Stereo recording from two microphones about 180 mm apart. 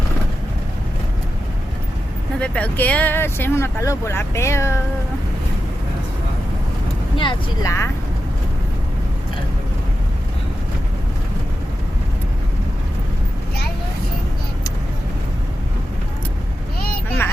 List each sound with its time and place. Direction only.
2.4 s speech: 10° left (ahead or behind)
7.2 s speech: 25° left (ahead or behind)